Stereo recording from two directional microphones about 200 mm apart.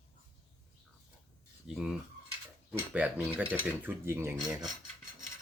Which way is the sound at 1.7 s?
5° right (ahead or behind).